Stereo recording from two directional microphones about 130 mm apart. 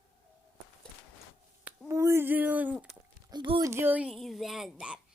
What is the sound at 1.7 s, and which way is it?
Speech, 20° right (ahead or behind).